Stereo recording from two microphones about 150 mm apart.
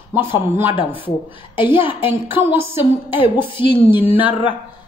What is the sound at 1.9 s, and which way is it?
Speech, 10° right (ahead or behind).